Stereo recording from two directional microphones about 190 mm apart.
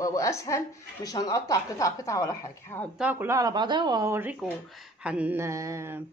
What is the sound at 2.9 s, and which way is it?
Speech, 10° right (ahead or behind).